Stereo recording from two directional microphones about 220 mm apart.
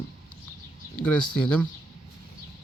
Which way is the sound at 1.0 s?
5° left (ahead or behind).